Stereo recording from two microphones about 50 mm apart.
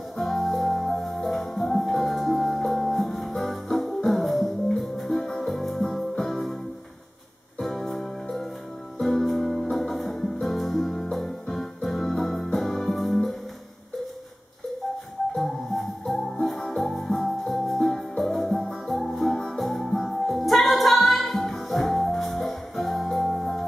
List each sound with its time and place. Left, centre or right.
0.2 s music: centre
7.6 s music: centre
15.3 s music: centre